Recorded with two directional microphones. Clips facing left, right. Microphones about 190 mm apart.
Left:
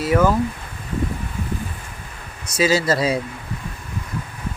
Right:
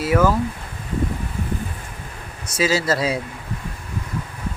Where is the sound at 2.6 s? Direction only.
5° right (ahead or behind).